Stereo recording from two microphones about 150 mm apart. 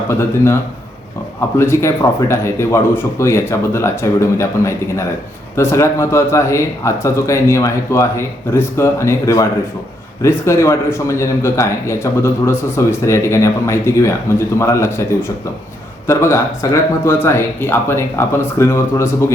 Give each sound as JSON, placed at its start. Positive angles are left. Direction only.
{"t": 0.1, "sound": "a man's voice", "side_deg": 15}